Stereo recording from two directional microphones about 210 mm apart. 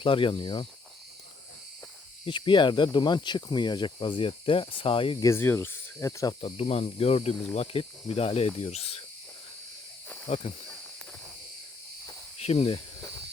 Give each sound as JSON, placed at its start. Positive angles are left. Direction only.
{"t": 0.0, "sound": "speech", "side_deg": 25}
{"t": 2.2, "sound": "speech", "side_deg": 25}
{"t": 5.3, "sound": "speech", "side_deg": 10}
{"t": 10.2, "sound": "speech", "side_deg": 30}
{"t": 12.4, "sound": "speech", "side_deg": 30}